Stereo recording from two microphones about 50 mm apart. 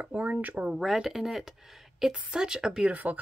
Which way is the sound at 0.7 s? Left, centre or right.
Centre.